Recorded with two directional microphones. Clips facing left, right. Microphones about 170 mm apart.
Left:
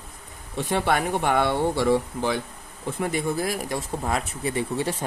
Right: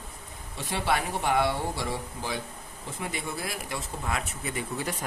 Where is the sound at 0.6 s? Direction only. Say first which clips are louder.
Left 5 dB; 55° left (ahead or behind).